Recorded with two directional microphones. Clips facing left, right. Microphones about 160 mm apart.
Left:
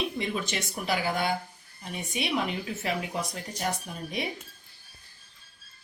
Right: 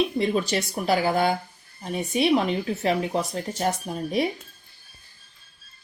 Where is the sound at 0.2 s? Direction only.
35° right (ahead or behind).